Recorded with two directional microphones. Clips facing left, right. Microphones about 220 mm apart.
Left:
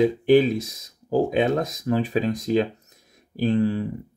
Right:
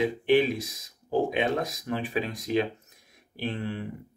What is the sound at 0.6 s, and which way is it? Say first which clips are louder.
Speech: left 4 dB; 30° left (ahead or behind).